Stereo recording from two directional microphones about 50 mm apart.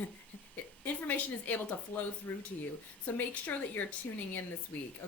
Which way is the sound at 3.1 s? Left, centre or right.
Left.